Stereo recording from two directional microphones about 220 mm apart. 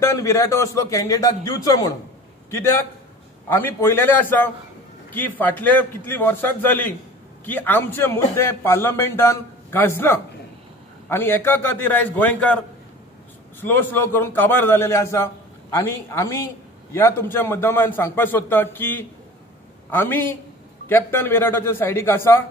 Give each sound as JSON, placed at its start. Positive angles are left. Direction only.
{"t": 0.0, "sound": "a man's voice", "side_deg": 15}
{"t": 3.4, "sound": "a man's voice", "side_deg": 10}
{"t": 13.6, "sound": "a man's voice", "side_deg": 10}